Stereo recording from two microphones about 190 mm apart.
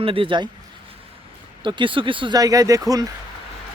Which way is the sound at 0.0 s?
30° right (ahead or behind).